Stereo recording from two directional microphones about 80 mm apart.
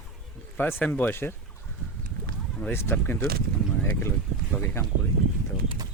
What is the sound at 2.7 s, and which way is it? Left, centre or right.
Speech, left.